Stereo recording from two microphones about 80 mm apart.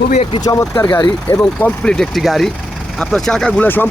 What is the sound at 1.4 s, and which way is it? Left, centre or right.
Speech, centre.